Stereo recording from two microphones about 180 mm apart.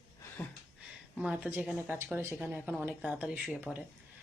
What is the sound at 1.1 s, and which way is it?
Speech, 5° right (ahead or behind).